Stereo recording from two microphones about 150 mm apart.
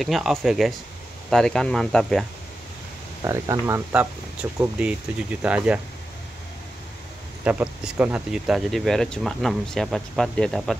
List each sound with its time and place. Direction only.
0.0 s speech: centre (ahead or behind)
3.3 s speech: 20° right (ahead or behind)
7.4 s speech: 10° right (ahead or behind)